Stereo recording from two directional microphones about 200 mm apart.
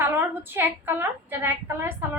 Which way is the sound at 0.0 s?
10° right (ahead or behind).